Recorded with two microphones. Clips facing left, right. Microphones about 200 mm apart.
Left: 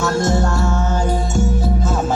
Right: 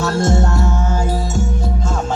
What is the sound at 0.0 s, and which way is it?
Music, 30° right (ahead or behind).